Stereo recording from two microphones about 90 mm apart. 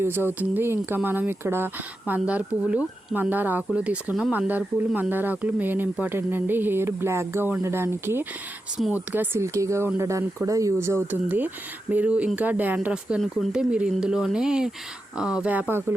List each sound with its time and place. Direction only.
0.0 s speech: 25° right (ahead or behind)
9.4 s speech: 35° right (ahead or behind); by 15.6 s 15° right (ahead or behind)